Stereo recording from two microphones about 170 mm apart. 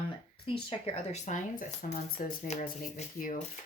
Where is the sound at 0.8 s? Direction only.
40° left (ahead or behind).